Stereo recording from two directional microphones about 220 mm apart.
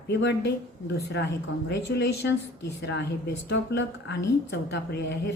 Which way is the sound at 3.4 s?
50° left (ahead or behind).